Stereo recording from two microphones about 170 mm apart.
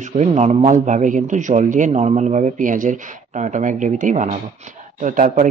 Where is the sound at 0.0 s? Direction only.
40° right (ahead or behind).